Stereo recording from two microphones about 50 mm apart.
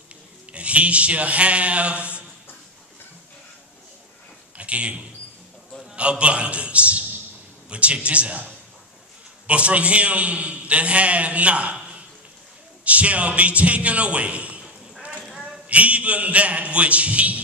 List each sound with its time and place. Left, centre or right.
0.5 s a man's voice: right
4.6 s a sound: right
5.9 s a man's voice: right
9.5 s a man's voice: right
12.8 s a man's voice: right
15.2 s a sound: centre
15.7 s a man's voice: right